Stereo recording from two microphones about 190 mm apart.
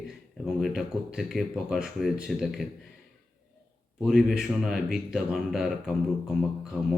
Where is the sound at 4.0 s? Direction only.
Centre (ahead or behind).